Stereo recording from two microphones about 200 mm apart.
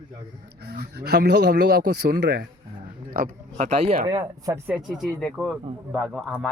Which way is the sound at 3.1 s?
45° right (ahead or behind).